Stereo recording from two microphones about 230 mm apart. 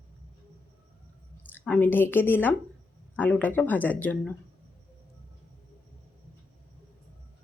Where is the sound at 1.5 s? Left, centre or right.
Centre.